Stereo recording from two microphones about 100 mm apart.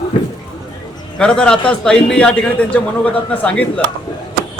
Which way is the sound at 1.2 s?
10° left (ahead or behind).